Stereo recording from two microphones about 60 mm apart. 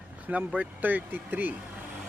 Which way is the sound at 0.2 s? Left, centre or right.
Right.